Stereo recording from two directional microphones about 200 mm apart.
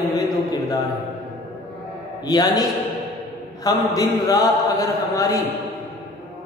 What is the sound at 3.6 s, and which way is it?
A man's voice, 15° left (ahead or behind).